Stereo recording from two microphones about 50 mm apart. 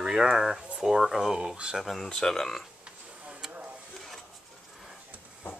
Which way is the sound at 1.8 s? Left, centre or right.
Centre.